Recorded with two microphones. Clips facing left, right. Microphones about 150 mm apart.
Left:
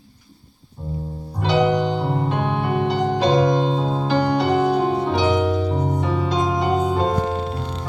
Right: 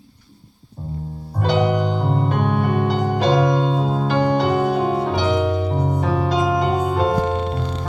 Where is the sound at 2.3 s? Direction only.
50° right (ahead or behind).